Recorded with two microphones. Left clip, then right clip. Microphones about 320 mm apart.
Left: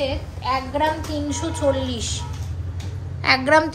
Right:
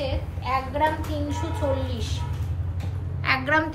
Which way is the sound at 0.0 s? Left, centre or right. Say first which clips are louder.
Left 5 dB; left.